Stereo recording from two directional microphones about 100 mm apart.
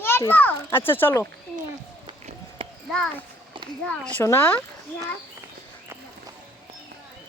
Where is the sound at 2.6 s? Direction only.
65° right (ahead or behind).